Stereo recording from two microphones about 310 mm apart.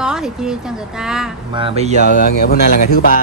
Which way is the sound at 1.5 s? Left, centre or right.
Centre.